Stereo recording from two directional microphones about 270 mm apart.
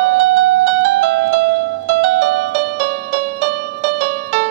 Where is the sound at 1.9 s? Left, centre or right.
Right.